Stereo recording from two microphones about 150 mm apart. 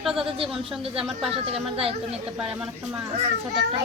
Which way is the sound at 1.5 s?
40° right (ahead or behind).